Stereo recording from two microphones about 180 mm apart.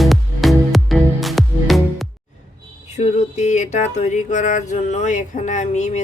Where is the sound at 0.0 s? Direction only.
Centre (ahead or behind).